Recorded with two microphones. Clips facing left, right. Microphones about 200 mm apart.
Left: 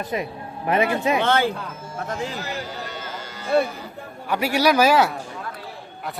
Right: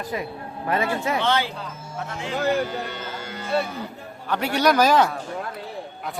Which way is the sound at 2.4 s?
55° right (ahead or behind).